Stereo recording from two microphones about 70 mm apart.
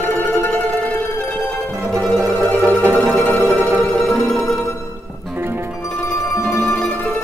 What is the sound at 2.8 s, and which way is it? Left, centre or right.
Music, right.